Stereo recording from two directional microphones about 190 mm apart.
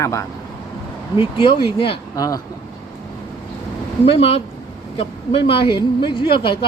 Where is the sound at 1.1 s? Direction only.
25° left (ahead or behind).